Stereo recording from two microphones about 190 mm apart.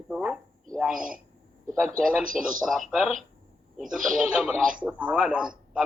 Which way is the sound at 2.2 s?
45° right (ahead or behind).